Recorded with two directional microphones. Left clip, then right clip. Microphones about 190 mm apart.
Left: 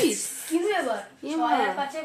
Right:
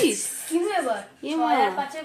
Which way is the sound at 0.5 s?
15° left (ahead or behind).